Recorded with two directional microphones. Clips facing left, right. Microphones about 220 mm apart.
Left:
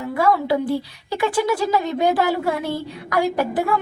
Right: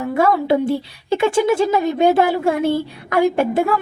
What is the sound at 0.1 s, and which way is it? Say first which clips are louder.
A woman's voice: right 3 dB; 25° right (ahead or behind).